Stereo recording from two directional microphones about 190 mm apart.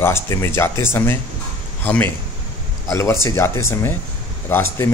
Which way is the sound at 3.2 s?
15° left (ahead or behind).